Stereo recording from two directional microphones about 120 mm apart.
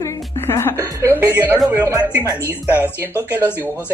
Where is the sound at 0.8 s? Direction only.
20° right (ahead or behind).